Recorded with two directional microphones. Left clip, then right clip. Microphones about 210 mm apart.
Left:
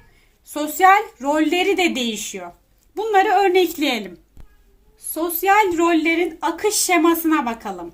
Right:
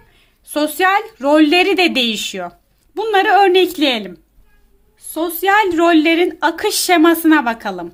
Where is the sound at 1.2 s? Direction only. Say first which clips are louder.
Right 7 dB; 50° right (ahead or behind).